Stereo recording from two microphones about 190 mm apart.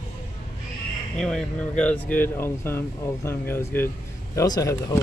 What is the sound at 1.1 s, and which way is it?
Speech, 5° left (ahead or behind).